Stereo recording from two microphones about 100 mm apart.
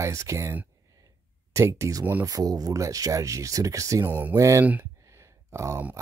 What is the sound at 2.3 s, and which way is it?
Speech, 35° right (ahead or behind).